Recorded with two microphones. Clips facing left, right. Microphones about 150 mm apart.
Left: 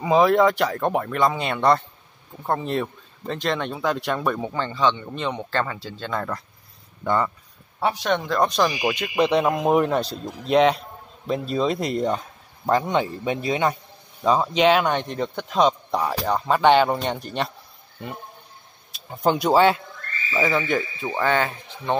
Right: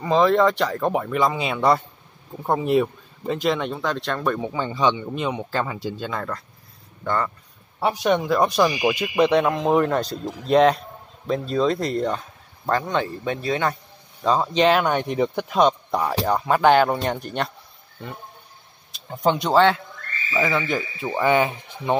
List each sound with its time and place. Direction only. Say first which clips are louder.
0.0 s speech: left 1 dB; 10° left (ahead or behind); by 6.1 s 15° right (ahead or behind)
6.1 s speech: left 1 dB; 5° left (ahead or behind)
7.8 s speech: right 2 dB; 10° right (ahead or behind); by 13.7 s 15° left (ahead or behind)
14.2 s speech: even; 5° left (ahead or behind)
18.9 s speech: even; centre (ahead or behind)
21.3 s speech: right 5 dB; 15° right (ahead or behind)